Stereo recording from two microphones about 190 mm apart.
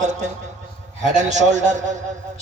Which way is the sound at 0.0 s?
40° right (ahead or behind).